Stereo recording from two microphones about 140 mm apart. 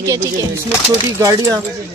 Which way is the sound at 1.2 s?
25° right (ahead or behind).